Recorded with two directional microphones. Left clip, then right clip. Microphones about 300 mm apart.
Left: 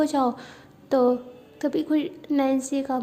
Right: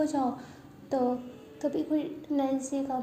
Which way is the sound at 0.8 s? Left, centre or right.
Left.